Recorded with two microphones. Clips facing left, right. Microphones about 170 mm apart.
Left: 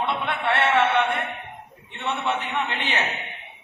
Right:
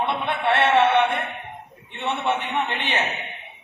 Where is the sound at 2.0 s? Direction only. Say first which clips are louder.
Right 2 dB; 20° right (ahead or behind).